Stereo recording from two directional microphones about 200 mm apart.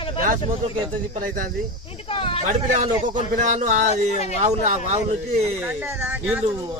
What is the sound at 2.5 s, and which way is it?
A man's voice, 40° right (ahead or behind).